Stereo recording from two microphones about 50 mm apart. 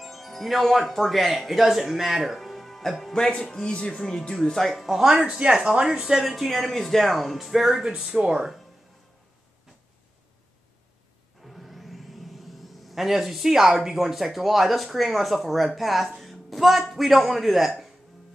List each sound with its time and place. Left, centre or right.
0.0 s speech: centre
4.6 s speech: centre
11.4 s a man's voice: centre